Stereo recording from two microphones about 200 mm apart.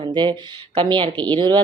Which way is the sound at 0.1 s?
20° right (ahead or behind).